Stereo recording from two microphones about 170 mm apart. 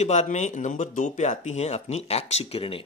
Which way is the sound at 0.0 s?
45° left (ahead or behind).